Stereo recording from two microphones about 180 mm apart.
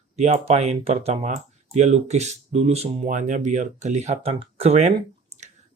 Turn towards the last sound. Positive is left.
turn(degrees=-35)  # may be behind; listen again after turning